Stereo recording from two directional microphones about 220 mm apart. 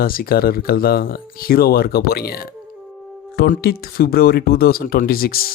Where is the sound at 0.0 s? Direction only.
40° left (ahead or behind).